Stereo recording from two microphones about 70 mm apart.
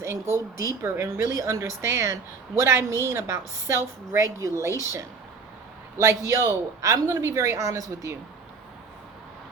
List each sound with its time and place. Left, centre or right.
0.0 s a woman's voice: right
1.2 s a woman's voice: right
6.0 s a woman's voice: right